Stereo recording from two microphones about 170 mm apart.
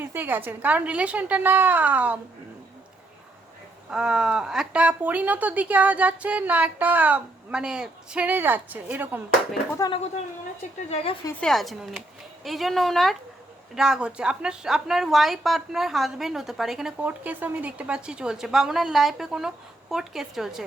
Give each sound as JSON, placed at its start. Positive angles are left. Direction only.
{"t": 0.0, "sound": "speech", "side_deg": -10}
{"t": 3.8, "sound": "speech", "side_deg": -5}
{"t": 9.8, "sound": "speech", "side_deg": 20}
{"t": 10.8, "sound": "a woman's voice", "side_deg": 35}
{"t": 11.3, "sound": "a woman's voice", "side_deg": 5}